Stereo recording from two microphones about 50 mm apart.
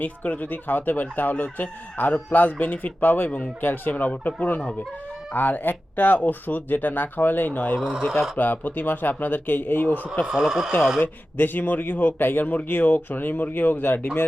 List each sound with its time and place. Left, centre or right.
0.0 s speech: left
7.8 s speech: centre
8.4 s speech: left
10.3 s speech: centre
11.0 s speech: left